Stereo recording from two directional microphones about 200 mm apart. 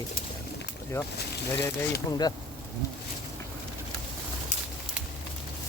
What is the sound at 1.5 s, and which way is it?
Speech, 15° left (ahead or behind).